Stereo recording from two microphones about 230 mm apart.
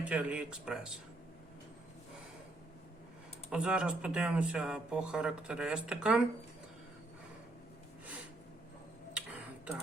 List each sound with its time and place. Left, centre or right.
0.0 s speech: centre
3.5 s speech: centre
9.1 s tick-tock: centre